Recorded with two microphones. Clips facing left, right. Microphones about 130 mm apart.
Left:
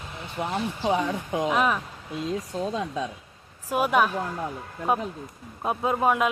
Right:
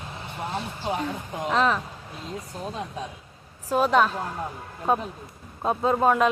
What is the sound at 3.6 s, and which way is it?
Speech, 10° left (ahead or behind).